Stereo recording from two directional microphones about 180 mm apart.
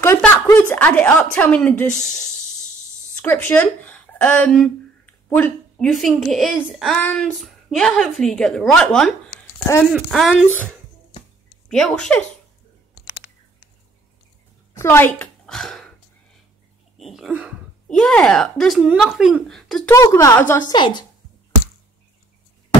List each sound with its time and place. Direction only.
0.0 s a sound: 15° left (ahead or behind)
3.2 s a woman's voice: 10° left (ahead or behind)
11.7 s a woman's voice: 5° left (ahead or behind)
14.7 s a woman's voice: 15° left (ahead or behind)
16.9 s a sound: centre (ahead or behind)
17.9 s a woman's voice: 5° left (ahead or behind)
19.9 s a woman's voice: 15° left (ahead or behind)
20.7 s speech: 25° left (ahead or behind)